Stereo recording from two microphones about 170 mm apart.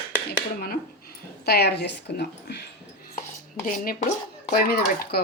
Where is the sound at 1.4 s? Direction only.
70° left (ahead or behind).